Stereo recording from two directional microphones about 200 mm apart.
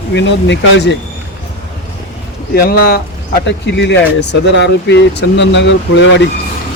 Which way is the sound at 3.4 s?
60° left (ahead or behind).